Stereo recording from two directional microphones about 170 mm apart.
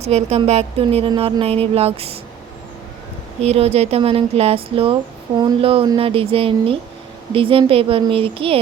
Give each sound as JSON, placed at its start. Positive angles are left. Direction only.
{"t": 0.0, "sound": "speech", "side_deg": -40}
{"t": 3.4, "sound": "speech", "side_deg": -35}